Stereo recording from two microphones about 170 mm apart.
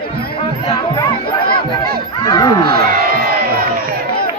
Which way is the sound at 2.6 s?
65° right (ahead or behind).